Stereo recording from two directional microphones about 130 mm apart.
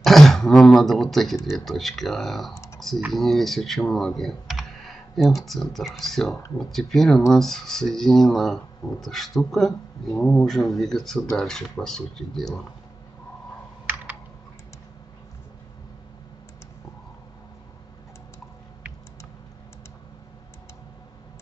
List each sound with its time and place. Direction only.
0.0 s speech: centre (ahead or behind)
2.5 s typing: 25° left (ahead or behind)
3.1 s speech: centre (ahead or behind)